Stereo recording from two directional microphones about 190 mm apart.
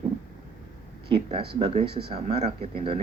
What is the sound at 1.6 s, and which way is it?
Speech, 30° right (ahead or behind).